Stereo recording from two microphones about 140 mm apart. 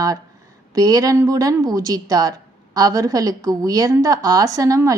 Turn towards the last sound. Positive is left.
turn(degrees=-25)  # may be behind; listen again after turning